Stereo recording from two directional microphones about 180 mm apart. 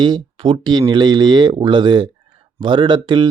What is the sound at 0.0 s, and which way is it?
Speech, 25° right (ahead or behind).